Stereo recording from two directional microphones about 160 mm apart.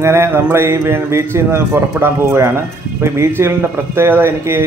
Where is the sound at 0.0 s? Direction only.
15° right (ahead or behind).